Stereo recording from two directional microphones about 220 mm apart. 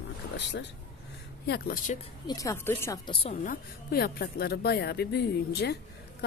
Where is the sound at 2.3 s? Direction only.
15° left (ahead or behind).